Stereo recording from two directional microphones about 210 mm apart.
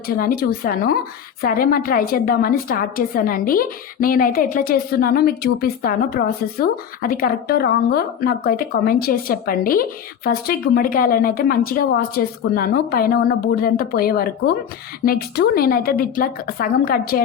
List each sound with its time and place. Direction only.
0.1 s a woman's voice: 45° left (ahead or behind)